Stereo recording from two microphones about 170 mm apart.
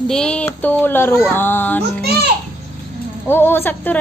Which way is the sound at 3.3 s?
15° left (ahead or behind).